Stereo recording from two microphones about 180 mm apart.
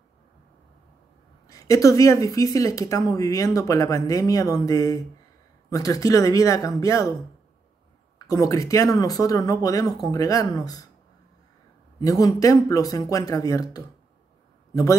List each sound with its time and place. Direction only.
1.5 s speech: 20° left (ahead or behind)
8.3 s speech: 20° left (ahead or behind)
12.0 s a man's voice: 20° left (ahead or behind)